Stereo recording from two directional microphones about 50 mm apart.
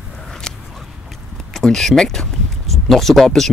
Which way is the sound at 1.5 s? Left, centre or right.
Centre.